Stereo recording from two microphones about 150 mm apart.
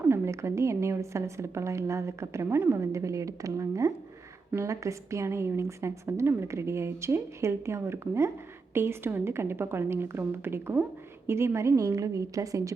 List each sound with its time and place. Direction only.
0.0 s a woman's voice: 15° right (ahead or behind)